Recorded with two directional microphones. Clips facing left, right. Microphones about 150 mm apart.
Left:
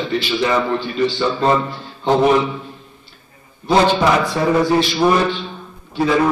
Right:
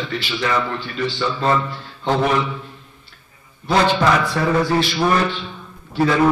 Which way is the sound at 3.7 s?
15° left (ahead or behind).